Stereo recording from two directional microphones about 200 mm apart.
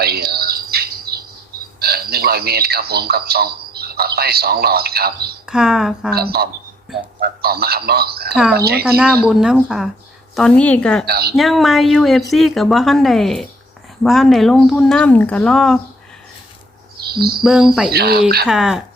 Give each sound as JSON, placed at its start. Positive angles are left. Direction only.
{"t": 0.0, "sound": "squeal", "side_deg": -50}
{"t": 1.8, "sound": "speech", "side_deg": -50}
{"t": 5.5, "sound": "speech", "side_deg": -5}
{"t": 6.1, "sound": "a man's voice", "side_deg": -50}
{"t": 9.2, "sound": "speech", "side_deg": -5}
{"t": 11.0, "sound": "a man's voice", "side_deg": -50}
{"t": 11.3, "sound": "speech", "side_deg": 0}
{"t": 17.1, "sound": "a sound", "side_deg": -50}
{"t": 17.4, "sound": "speech", "side_deg": -5}
{"t": 17.9, "sound": "a man's voice", "side_deg": -50}
{"t": 18.4, "sound": "speech", "side_deg": -5}